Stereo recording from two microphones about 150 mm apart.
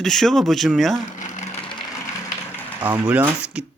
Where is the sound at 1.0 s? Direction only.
55° left (ahead or behind).